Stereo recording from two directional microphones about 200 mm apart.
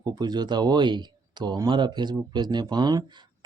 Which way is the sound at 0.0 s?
20° right (ahead or behind).